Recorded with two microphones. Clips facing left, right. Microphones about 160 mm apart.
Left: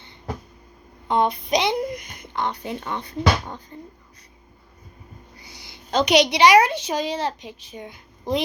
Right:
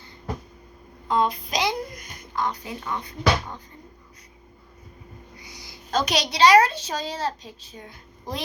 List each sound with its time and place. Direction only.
1.0 s speech: 25° left (ahead or behind)
5.4 s a sound: 30° left (ahead or behind)
5.9 s a woman's voice: 15° left (ahead or behind)